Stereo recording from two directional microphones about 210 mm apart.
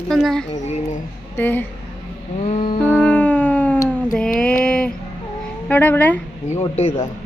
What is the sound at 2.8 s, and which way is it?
Music, 10° left (ahead or behind).